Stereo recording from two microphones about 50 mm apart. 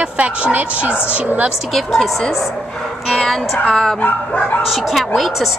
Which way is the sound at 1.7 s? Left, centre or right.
Centre.